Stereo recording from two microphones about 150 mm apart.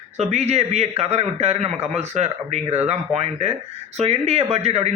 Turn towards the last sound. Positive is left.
turn(degrees=-45)  # may be behind; listen again after turning